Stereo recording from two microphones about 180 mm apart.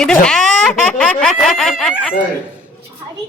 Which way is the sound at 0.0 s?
5° left (ahead or behind).